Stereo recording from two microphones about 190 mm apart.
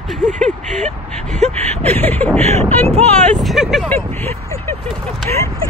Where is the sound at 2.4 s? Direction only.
35° right (ahead or behind).